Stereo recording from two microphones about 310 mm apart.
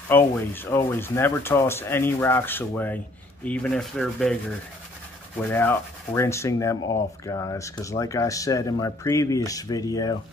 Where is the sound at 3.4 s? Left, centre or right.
Centre.